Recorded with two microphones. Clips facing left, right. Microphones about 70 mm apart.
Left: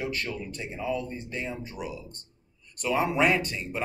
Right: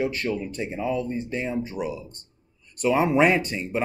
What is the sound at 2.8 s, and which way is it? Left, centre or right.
Speech, right.